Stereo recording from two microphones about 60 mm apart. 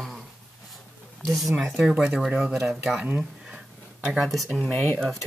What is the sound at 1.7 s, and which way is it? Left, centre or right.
Speech, centre.